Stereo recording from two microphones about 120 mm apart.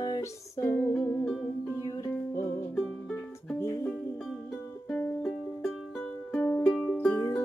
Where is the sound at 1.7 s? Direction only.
30° left (ahead or behind).